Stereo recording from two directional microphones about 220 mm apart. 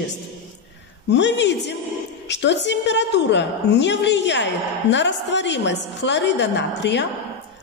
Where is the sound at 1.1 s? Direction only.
55° left (ahead or behind).